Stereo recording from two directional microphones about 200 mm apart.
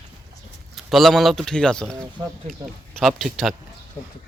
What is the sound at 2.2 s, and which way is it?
Speech, 15° right (ahead or behind).